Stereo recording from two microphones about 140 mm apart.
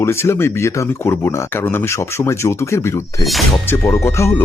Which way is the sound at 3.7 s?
15° left (ahead or behind).